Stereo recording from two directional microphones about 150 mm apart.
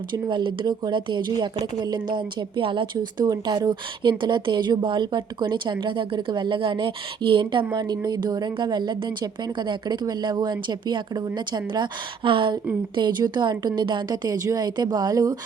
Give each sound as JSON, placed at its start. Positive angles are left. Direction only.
{"t": 0.1, "sound": "a woman's voice", "side_deg": -30}